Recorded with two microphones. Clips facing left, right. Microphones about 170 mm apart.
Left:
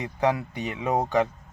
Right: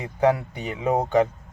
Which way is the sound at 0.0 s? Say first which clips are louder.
Right 4 dB; 30° right (ahead or behind).